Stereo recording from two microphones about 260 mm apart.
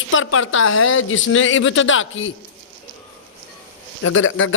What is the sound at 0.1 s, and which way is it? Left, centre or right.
A man's voice, left.